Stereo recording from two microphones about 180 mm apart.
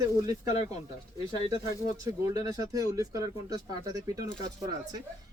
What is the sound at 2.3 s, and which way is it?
Speech, 20° right (ahead or behind).